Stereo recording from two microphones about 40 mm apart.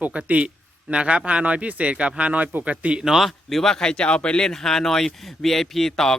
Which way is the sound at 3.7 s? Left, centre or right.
Centre.